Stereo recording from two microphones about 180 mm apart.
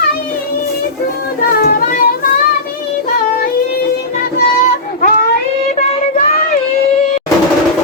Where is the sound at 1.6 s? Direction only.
55° left (ahead or behind).